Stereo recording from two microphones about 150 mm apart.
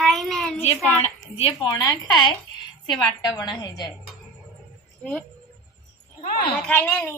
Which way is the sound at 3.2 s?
25° left (ahead or behind).